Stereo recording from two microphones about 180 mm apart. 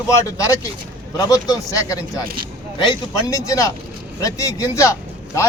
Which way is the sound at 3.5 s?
20° left (ahead or behind).